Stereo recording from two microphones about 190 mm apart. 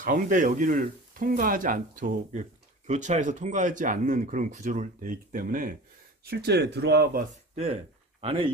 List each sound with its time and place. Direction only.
0.0 s speech: 45° right (ahead or behind)
6.2 s speech: 60° right (ahead or behind)
7.5 s speech: 30° right (ahead or behind)